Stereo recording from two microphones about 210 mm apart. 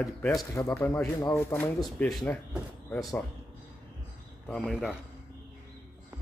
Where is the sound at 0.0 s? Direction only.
15° left (ahead or behind).